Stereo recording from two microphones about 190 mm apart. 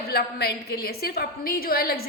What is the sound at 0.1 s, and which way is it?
A woman's voice, 55° left (ahead or behind).